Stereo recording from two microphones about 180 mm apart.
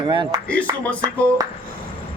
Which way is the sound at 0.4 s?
10° left (ahead or behind).